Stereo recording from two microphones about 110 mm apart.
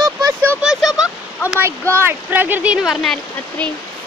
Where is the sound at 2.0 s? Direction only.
15° right (ahead or behind); by 3.1 s centre (ahead or behind).